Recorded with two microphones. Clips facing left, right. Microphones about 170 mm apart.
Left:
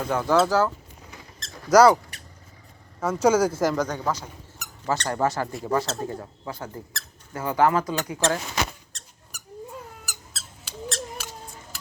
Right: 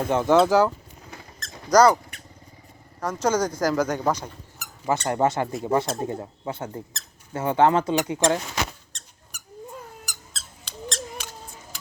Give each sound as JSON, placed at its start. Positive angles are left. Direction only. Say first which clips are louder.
{"t": 0.1, "sound": "speech", "louder": "right 3 dB", "side_deg": -20}
{"t": 1.7, "sound": "speech", "louder": "left 1 dB", "side_deg": 5}
{"t": 3.0, "sound": "speech", "louder": "left 3 dB", "side_deg": 5}
{"t": 3.8, "sound": "speech", "louder": "right 3 dB", "side_deg": -15}
{"t": 8.9, "sound": "squeak", "louder": "left 1 dB", "side_deg": 5}